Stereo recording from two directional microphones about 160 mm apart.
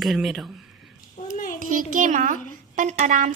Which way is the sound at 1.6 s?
55° right (ahead or behind).